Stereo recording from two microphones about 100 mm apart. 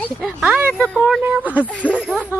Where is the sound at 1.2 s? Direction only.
15° right (ahead or behind).